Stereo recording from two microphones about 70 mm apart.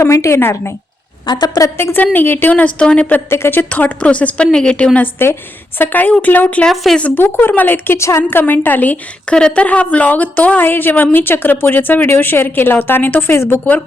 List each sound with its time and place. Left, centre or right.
0.0 s speech: left
1.3 s a woman's voice: left
2.1 s a woman's voice: left
2.5 s a woman's voice: centre
3.2 s a woman's voice: left; by 4.9 s centre
5.2 s a woman's voice: left
6.7 s speech: centre
7.2 s speech: left
7.9 s speech: left
8.4 s a woman's voice: left